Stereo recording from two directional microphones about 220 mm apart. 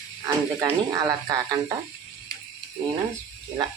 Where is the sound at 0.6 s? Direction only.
15° right (ahead or behind).